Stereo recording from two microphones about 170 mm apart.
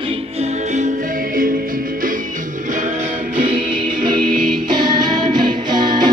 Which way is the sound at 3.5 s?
30° right (ahead or behind).